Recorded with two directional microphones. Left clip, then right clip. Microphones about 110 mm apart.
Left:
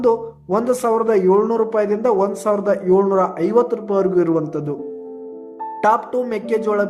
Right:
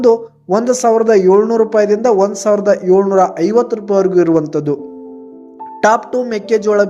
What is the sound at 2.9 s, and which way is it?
A man's voice, 10° right (ahead or behind).